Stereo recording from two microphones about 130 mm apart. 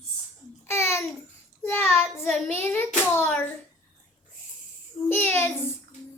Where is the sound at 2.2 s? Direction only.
15° left (ahead or behind).